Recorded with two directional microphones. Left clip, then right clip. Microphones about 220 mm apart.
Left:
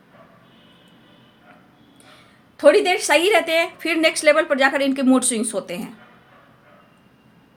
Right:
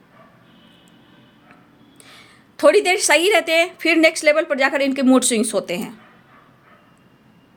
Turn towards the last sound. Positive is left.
turn(degrees=-35)  # may be behind; listen again after turning